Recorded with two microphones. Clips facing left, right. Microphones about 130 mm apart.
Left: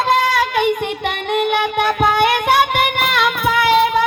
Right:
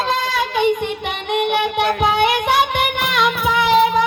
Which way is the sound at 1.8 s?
50° left (ahead or behind).